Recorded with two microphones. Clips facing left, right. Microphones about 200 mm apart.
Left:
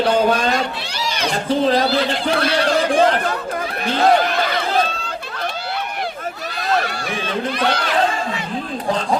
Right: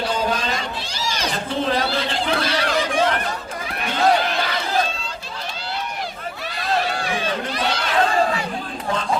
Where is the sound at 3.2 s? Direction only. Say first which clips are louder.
Left 6 dB; 60° left (ahead or behind).